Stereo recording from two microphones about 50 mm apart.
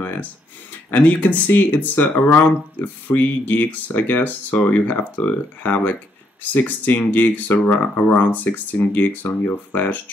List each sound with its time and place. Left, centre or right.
0.9 s speech: left